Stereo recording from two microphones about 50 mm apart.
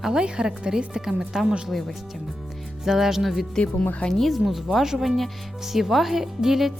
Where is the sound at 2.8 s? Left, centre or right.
Centre.